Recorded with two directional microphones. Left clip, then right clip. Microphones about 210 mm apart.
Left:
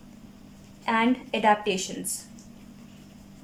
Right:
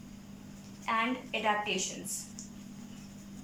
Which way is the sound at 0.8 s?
40° left (ahead or behind).